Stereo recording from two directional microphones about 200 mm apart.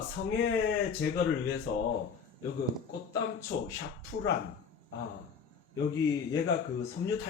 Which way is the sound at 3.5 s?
65° left (ahead or behind).